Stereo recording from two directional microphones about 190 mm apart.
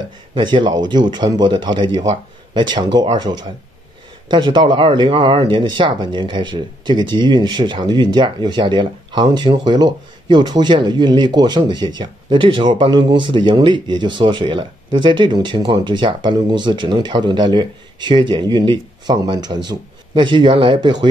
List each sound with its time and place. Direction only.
0.3 s speech: 25° right (ahead or behind)